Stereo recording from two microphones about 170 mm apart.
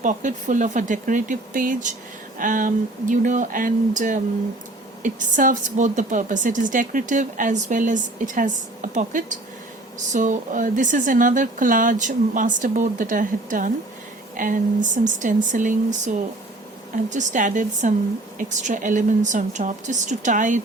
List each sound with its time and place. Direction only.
0.0 s a woman's voice: 50° right (ahead or behind)